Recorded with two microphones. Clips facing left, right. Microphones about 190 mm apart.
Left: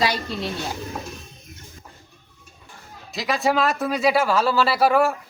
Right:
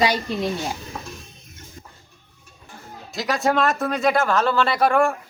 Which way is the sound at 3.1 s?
Centre (ahead or behind).